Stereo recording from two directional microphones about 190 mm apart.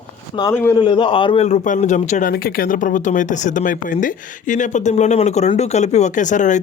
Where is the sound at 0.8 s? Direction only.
25° left (ahead or behind).